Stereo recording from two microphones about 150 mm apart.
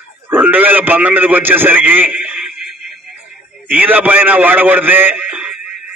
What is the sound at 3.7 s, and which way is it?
A man's voice, 10° right (ahead or behind).